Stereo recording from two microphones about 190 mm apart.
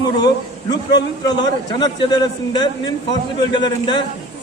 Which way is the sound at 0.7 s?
20° left (ahead or behind).